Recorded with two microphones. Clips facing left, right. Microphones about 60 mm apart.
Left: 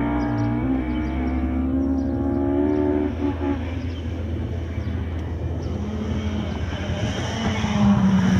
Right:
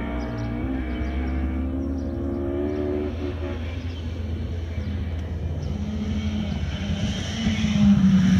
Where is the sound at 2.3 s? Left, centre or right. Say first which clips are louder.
Left 6 dB; left.